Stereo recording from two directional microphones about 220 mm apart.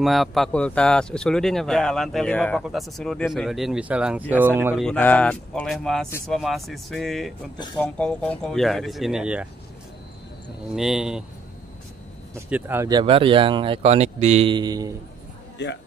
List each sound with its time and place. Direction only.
0.0 s speech: centre (ahead or behind)
4.8 s speech: 5° left (ahead or behind)
10.7 s speech: centre (ahead or behind)
12.4 s speech: 10° right (ahead or behind)
15.5 s a man's voice: 55° left (ahead or behind)